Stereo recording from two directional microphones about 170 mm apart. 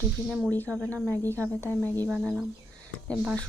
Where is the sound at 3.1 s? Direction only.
5° left (ahead or behind).